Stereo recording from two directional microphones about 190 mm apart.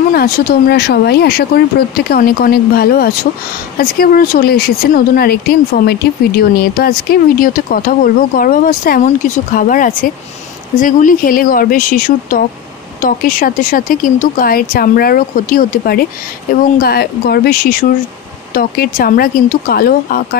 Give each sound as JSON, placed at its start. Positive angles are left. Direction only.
{"t": 0.1, "sound": "a woman's voice", "side_deg": 55}